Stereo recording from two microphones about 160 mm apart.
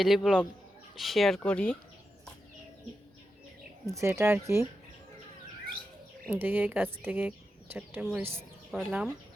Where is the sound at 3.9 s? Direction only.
20° right (ahead or behind).